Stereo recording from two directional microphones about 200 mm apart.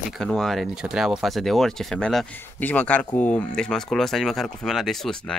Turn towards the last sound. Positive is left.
turn(degrees=0)  # may be behind; listen again after turning